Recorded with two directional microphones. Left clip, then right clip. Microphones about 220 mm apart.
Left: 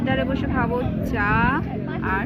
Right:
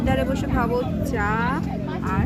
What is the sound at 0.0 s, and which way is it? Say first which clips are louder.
Vehicle: even; 30° right (ahead or behind).